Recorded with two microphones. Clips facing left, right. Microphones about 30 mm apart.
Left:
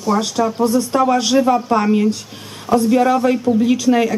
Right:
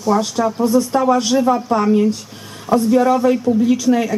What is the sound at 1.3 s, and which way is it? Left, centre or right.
Speech, left.